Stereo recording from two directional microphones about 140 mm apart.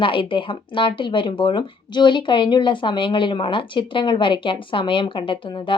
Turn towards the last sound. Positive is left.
turn(degrees=35)  # may be behind; listen again after turning